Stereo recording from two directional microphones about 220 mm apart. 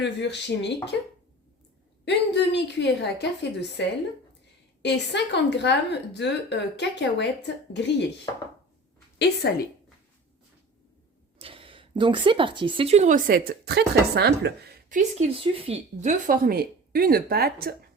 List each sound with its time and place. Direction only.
0.0 s a woman's voice: 50° left (ahead or behind)
2.0 s a woman's voice: 50° left (ahead or behind)
9.1 s a woman's voice: 50° left (ahead or behind)
11.3 s speech: 25° right (ahead or behind); by 14.7 s 50° right (ahead or behind)
14.9 s speech: 35° right (ahead or behind)
15.4 s speech: 25° right (ahead or behind); by 17.7 s 45° right (ahead or behind)